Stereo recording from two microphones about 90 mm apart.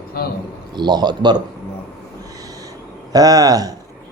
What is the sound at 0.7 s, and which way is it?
Speech, 55° right (ahead or behind).